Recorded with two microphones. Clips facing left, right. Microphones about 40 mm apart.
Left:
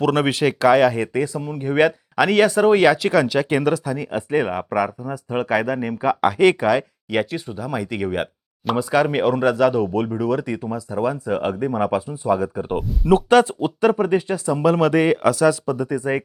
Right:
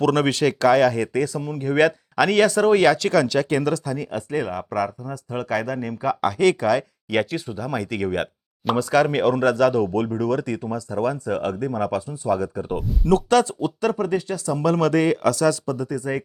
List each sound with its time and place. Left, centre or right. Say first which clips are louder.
0.0 s speech: left 1 dB; centre
7.1 s speech: even; centre
12.8 s speech: even; centre
13.1 s speech: left 3 dB; left